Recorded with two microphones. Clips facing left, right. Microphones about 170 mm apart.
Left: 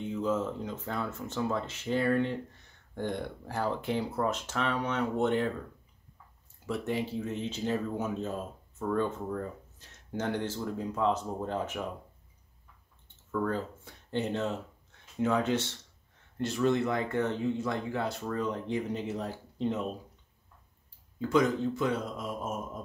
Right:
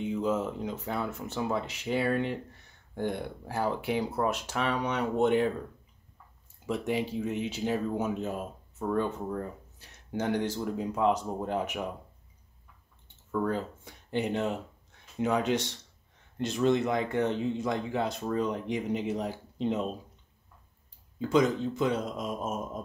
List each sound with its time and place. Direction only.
0.0 s speech: 15° right (ahead or behind)
6.6 s speech: 15° right (ahead or behind)
13.3 s speech: 15° right (ahead or behind)
21.2 s speech: 20° right (ahead or behind)